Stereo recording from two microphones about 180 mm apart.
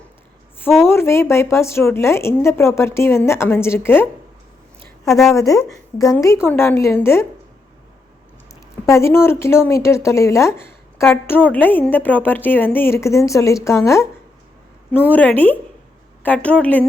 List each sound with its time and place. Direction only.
0.9 s speech: 15° left (ahead or behind)
5.0 s speech: centre (ahead or behind)
5.3 s speech: 15° left (ahead or behind)
8.9 s speech: 15° left (ahead or behind)